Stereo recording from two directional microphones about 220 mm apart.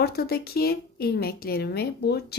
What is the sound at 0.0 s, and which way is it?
Speech, 45° left (ahead or behind).